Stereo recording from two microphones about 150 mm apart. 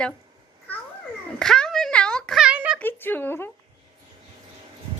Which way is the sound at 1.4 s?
5° left (ahead or behind).